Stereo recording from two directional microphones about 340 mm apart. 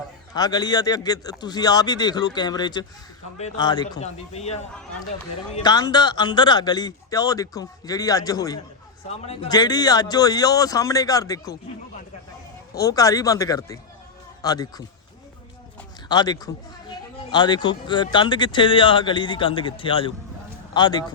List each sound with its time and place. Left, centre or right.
0.3 s a man's voice: centre
5.6 s speech: centre
12.8 s speech: centre
16.0 s speech: centre